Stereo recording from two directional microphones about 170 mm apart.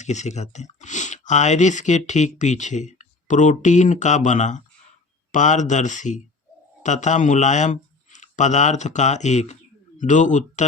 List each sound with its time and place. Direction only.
0.0 s speech: 45° left (ahead or behind)